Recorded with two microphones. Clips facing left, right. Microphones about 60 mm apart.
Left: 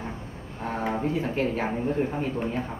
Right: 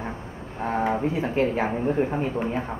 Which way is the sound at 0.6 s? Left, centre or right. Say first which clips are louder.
Right 4 dB; right.